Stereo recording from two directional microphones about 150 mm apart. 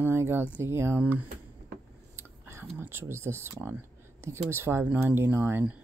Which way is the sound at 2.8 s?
15° right (ahead or behind).